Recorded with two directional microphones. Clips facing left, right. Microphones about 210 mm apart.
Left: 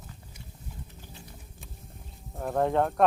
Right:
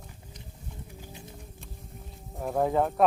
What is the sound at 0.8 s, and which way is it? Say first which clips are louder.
Wild animals: right 4 dB; 10° right (ahead or behind).